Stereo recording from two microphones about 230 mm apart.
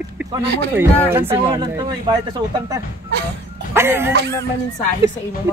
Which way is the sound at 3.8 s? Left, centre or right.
Centre.